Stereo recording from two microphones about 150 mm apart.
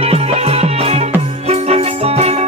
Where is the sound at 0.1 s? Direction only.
45° right (ahead or behind).